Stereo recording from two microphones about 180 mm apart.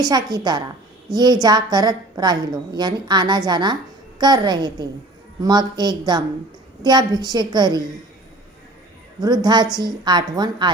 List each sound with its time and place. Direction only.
0.0 s a woman's voice: 20° right (ahead or behind)
9.2 s a woman's voice: 25° right (ahead or behind)